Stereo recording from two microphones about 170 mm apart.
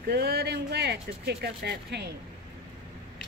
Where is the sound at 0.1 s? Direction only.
70° right (ahead or behind).